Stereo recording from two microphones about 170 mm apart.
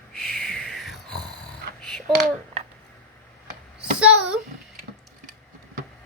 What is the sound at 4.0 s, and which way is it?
Speech, 5° right (ahead or behind).